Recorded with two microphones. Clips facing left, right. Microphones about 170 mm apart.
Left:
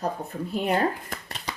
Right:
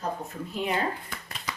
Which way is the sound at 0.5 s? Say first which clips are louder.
Left 4 dB; 45° left (ahead or behind).